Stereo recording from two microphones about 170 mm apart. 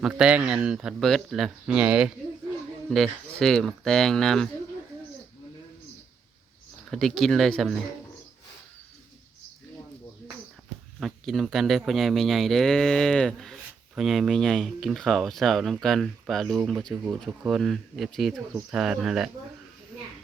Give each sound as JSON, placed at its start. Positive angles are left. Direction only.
{"t": 0.0, "sound": "speech", "side_deg": -5}
{"t": 6.9, "sound": "speech", "side_deg": 0}
{"t": 11.0, "sound": "speech", "side_deg": 0}